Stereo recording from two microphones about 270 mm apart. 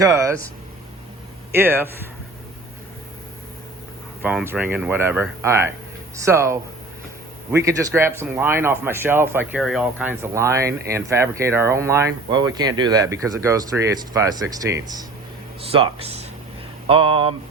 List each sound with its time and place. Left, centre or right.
0.0 s speech: centre
1.5 s speech: centre
4.2 s speech: centre